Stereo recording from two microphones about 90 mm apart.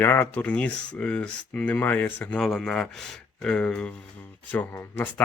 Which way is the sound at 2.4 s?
5° left (ahead or behind).